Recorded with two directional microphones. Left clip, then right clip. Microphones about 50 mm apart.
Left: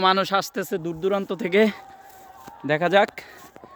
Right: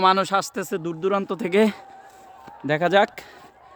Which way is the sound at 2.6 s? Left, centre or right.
Right.